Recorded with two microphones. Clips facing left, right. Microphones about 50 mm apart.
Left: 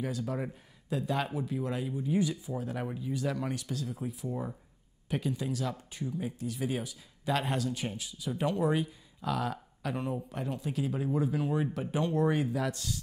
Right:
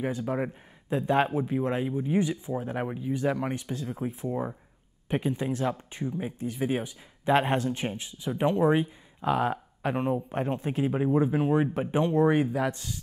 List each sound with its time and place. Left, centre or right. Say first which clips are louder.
0.0 s speech: right 5 dB; right